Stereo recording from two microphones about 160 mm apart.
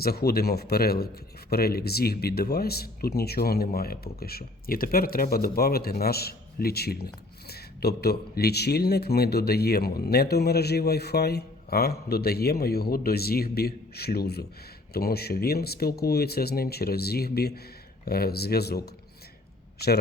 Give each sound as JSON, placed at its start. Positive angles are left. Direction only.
{"t": 0.0, "sound": "speech", "side_deg": 75}